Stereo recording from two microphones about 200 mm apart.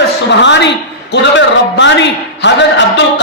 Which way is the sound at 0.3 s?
60° left (ahead or behind).